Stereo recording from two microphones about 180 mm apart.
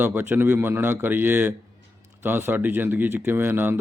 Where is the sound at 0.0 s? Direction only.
10° right (ahead or behind).